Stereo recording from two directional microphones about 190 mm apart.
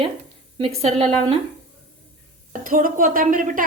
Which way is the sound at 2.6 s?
45° right (ahead or behind).